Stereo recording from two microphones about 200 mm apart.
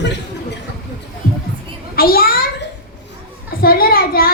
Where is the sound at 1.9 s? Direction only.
50° left (ahead or behind).